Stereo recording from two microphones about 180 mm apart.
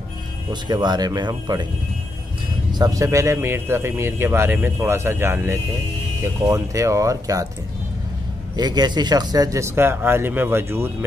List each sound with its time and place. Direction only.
0.5 s speech: 25° right (ahead or behind)
2.7 s a man's voice: 20° right (ahead or behind)
8.5 s a man's voice: 25° right (ahead or behind)